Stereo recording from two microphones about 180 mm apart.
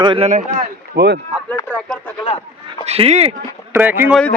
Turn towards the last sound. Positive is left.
turn(degrees=-10)  # may be behind; listen again after turning